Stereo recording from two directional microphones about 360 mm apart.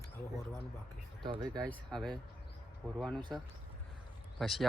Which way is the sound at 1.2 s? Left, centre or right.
Centre.